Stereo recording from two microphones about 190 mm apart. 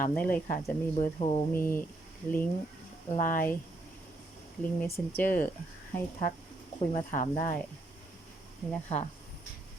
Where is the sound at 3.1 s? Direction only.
45° left (ahead or behind).